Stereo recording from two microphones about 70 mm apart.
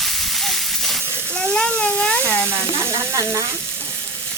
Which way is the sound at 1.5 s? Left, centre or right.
Centre.